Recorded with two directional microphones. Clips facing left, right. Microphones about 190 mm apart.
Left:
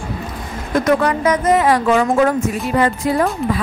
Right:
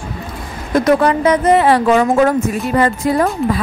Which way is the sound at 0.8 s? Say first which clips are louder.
Right 3 dB; 30° right (ahead or behind).